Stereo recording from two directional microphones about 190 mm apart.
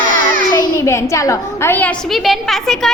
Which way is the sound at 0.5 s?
15° left (ahead or behind).